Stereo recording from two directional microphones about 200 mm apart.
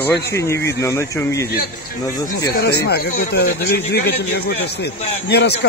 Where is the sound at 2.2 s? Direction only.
50° left (ahead or behind).